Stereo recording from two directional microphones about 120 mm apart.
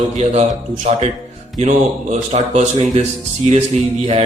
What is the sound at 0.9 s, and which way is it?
A man's voice, 70° right (ahead or behind).